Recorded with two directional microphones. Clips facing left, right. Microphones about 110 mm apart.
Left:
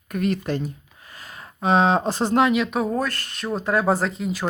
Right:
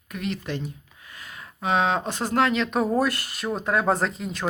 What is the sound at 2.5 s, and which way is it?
Speech, 5° left (ahead or behind).